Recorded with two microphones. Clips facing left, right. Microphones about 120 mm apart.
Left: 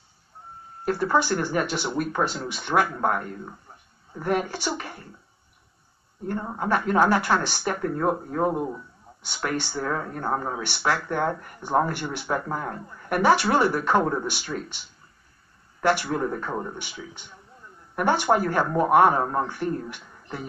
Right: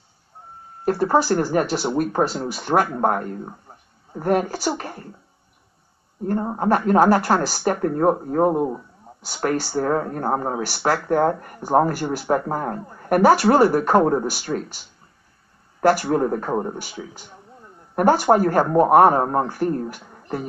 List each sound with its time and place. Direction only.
0.8 s a woman's voice: 35° right (ahead or behind)
6.2 s a woman's voice: 35° right (ahead or behind)